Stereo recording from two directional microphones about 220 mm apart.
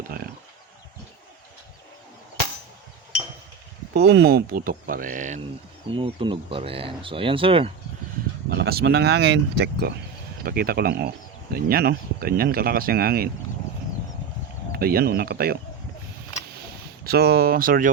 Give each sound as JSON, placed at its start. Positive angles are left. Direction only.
{"t": 3.9, "sound": "speech", "side_deg": -50}
{"t": 5.9, "sound": "speech", "side_deg": -20}
{"t": 8.4, "sound": "speech", "side_deg": -45}
{"t": 14.7, "sound": "speech", "side_deg": -45}
{"t": 17.1, "sound": "speech", "side_deg": -45}